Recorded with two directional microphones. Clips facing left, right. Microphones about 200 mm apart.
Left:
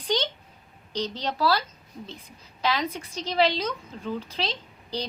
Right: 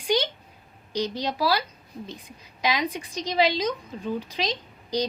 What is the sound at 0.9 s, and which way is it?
A woman's voice, 10° right (ahead or behind).